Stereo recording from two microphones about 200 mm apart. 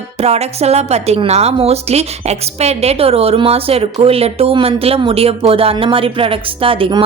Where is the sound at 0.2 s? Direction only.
30° right (ahead or behind).